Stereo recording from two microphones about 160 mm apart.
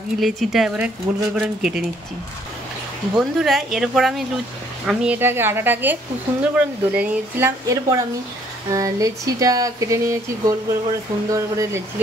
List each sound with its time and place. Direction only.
0.2 s speech: centre (ahead or behind)
3.2 s speech: centre (ahead or behind); by 11.8 s 20° right (ahead or behind)